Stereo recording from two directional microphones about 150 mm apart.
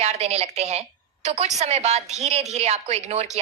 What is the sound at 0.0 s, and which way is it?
A woman's voice, 45° right (ahead or behind).